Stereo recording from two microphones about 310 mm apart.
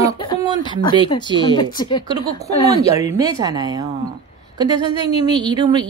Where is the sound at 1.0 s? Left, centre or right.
Centre.